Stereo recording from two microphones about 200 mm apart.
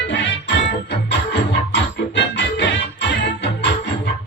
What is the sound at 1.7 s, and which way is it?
Music, 65° left (ahead or behind).